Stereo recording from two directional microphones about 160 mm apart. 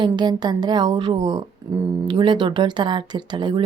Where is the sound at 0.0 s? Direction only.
25° right (ahead or behind).